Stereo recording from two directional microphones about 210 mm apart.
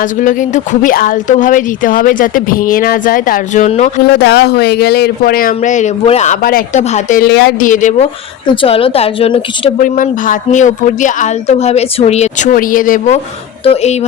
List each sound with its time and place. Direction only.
0.0 s a woman's voice: 40° left (ahead or behind)
4.1 s speech: 50° left (ahead or behind)
7.7 s a woman's voice: 35° left (ahead or behind)
8.4 s a woman's voice: 25° left (ahead or behind)